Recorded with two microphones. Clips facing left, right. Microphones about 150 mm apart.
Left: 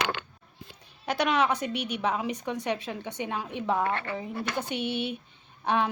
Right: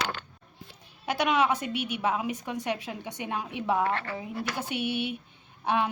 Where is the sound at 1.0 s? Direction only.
10° right (ahead or behind).